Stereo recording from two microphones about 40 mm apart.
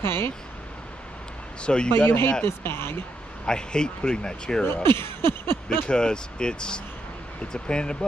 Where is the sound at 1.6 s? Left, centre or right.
Left.